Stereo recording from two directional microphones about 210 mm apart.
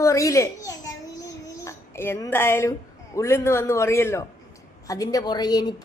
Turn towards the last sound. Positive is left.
turn(degrees=20)  # may be behind; listen again after turning